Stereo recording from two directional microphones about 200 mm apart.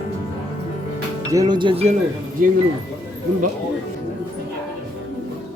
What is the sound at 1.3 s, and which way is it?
Music, 20° right (ahead or behind).